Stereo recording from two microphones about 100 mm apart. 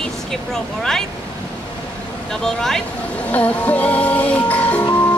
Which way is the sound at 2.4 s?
5° left (ahead or behind).